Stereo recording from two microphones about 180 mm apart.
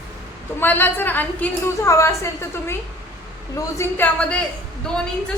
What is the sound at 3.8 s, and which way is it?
Speech, 10° left (ahead or behind).